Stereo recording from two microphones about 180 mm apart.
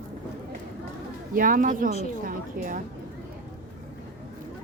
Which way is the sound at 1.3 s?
50° right (ahead or behind).